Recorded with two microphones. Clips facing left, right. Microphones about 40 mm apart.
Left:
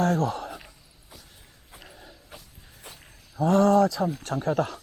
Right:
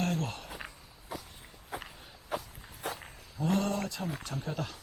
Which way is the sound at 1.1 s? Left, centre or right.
Right.